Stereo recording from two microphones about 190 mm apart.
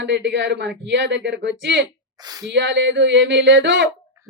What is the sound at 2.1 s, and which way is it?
Speech, 20° right (ahead or behind).